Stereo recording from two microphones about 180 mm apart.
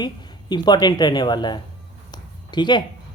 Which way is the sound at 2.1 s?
25° left (ahead or behind).